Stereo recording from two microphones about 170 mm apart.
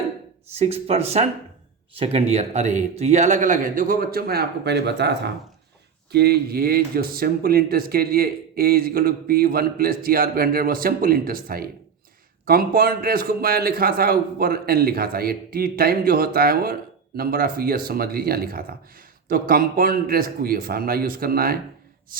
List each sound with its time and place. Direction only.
0.5 s a man's voice: 40° right (ahead or behind); by 5.3 s 80° right
6.1 s a man's voice: 70° right (ahead or behind)